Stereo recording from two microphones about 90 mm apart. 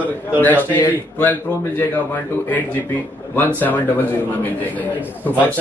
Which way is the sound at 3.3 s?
20° left (ahead or behind).